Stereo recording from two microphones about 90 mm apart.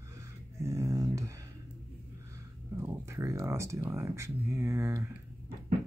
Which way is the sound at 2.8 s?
30° right (ahead or behind).